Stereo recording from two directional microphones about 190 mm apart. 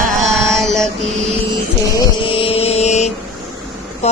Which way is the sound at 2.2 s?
30° left (ahead or behind).